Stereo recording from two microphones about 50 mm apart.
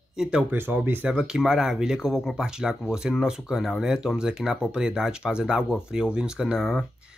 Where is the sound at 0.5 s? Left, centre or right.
Right.